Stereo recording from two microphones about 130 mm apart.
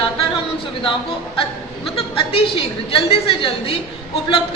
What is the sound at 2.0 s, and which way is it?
A woman's voice, 45° left (ahead or behind).